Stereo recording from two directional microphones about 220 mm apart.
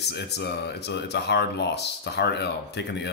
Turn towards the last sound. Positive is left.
turn(degrees=50)  # may be behind; listen again after turning